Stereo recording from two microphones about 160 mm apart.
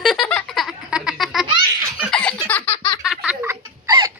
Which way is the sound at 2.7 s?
30° left (ahead or behind).